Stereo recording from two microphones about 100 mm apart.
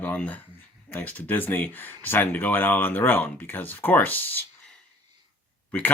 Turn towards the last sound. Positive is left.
turn(degrees=15)  # may be behind; listen again after turning